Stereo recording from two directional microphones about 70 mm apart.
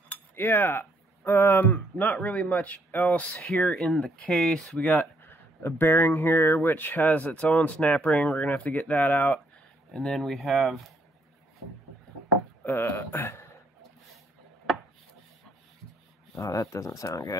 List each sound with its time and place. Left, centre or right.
0.1 s speech: left
3.6 s speech: centre
4.7 s speech: left
9.9 s speech: centre
12.6 s speech: left
16.4 s speech: left